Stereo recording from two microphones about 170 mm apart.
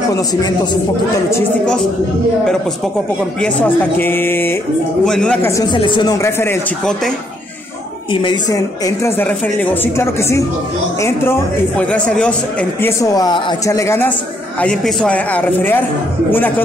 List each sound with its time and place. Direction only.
0.1 s speech: 20° left (ahead or behind)
3.3 s speech: 5° left (ahead or behind)
5.5 s speech: 20° left (ahead or behind)
6.1 s speech: 15° left (ahead or behind)
8.1 s speech: 30° left (ahead or behind); by 12.9 s 5° left (ahead or behind)
13.0 s speech: 20° left (ahead or behind)